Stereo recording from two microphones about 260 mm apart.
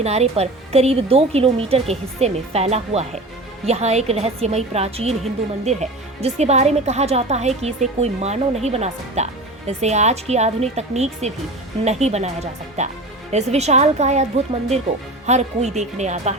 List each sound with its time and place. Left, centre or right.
0.0 s speech: right